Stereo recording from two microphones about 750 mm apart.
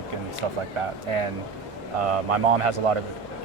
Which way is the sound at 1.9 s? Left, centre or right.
Right.